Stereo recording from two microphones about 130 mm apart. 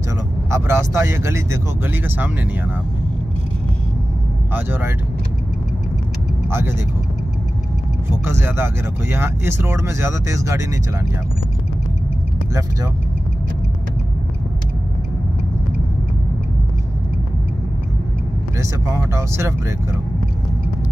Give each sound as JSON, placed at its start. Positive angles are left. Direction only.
{"t": 0.5, "sound": "speech", "side_deg": -20}
{"t": 4.6, "sound": "speech", "side_deg": -15}
{"t": 8.3, "sound": "speech", "side_deg": -20}
{"t": 18.6, "sound": "speech", "side_deg": -25}